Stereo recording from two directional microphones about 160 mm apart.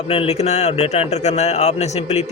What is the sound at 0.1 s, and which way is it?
Speech, 40° left (ahead or behind).